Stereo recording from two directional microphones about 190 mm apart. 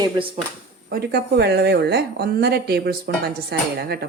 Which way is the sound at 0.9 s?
55° right (ahead or behind).